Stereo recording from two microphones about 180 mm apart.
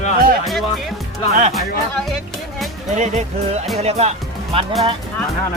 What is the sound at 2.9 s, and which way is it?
Speech, 40° right (ahead or behind).